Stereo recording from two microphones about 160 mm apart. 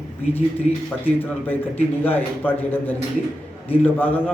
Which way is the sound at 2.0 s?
10° left (ahead or behind).